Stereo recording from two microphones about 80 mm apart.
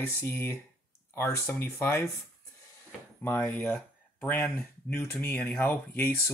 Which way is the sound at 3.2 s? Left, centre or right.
Left.